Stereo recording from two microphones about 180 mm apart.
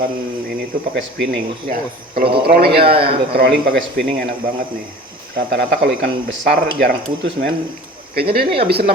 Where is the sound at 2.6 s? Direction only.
60° right (ahead or behind).